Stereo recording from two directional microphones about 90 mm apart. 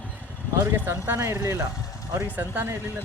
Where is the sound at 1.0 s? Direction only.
25° right (ahead or behind).